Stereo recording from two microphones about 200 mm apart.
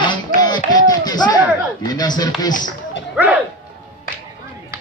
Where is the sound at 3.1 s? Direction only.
5° right (ahead or behind).